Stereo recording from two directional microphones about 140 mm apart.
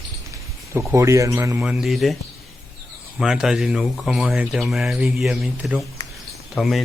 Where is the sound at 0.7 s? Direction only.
20° right (ahead or behind).